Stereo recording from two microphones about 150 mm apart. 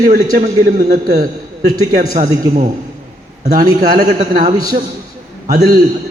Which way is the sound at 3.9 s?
90° right.